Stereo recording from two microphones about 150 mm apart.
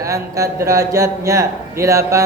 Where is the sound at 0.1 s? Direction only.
20° right (ahead or behind).